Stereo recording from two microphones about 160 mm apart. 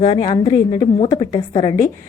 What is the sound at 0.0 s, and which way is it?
A woman's voice, 30° left (ahead or behind).